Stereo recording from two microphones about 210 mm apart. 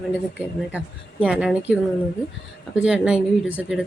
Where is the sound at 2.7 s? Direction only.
5° right (ahead or behind).